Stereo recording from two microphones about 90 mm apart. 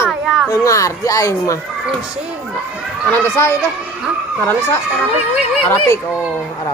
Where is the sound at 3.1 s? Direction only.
25° left (ahead or behind).